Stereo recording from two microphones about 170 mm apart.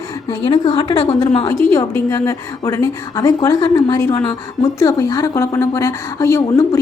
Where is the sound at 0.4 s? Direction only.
30° left (ahead or behind).